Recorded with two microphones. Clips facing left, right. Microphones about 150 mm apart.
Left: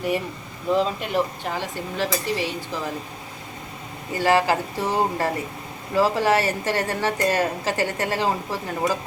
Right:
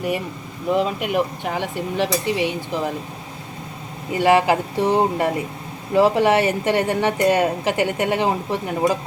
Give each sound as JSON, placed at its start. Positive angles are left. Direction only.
{"t": 0.8, "sound": "a woman's voice", "side_deg": -10}
{"t": 4.1, "sound": "a woman's voice", "side_deg": -20}